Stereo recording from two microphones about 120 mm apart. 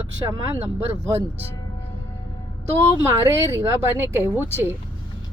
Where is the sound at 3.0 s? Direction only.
25° right (ahead or behind).